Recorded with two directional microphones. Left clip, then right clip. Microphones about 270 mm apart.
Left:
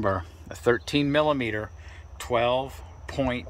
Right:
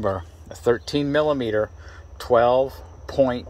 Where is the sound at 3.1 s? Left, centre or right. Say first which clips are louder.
Right 8 dB; centre.